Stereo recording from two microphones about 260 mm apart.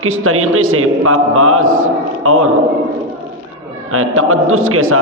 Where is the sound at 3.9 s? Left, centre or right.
Right.